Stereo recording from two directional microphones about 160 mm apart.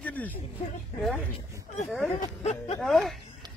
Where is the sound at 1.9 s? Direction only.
Centre (ahead or behind).